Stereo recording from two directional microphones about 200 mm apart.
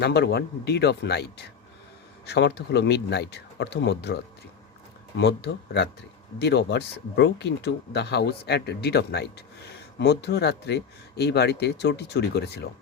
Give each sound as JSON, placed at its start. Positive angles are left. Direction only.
{"t": 0.0, "sound": "speech", "side_deg": 55}